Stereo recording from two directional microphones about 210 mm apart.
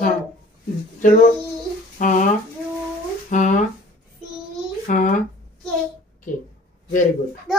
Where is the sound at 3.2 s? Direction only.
35° left (ahead or behind).